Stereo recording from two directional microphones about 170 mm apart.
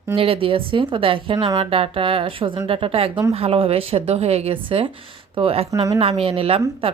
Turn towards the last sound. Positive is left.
turn(degrees=-35)  # may be behind; listen again after turning